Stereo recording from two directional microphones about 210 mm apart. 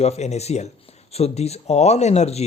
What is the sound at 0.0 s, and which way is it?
Speech, 30° left (ahead or behind).